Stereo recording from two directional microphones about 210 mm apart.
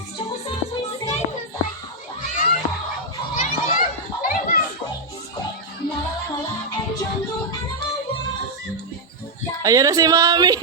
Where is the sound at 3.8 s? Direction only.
40° left (ahead or behind).